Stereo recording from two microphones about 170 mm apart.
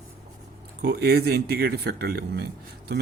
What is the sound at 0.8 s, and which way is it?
Speech, 70° right (ahead or behind).